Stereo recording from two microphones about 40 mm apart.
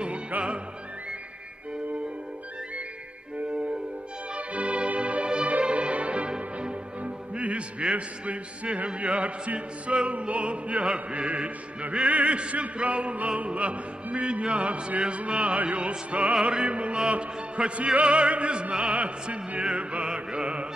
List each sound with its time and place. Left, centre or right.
0.3 s opera: right
4.4 s music: right
20.1 s mantra: right